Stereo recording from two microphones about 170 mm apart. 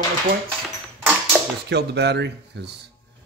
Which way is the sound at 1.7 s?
80° right.